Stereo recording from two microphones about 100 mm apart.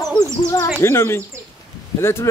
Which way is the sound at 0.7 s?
25° left (ahead or behind).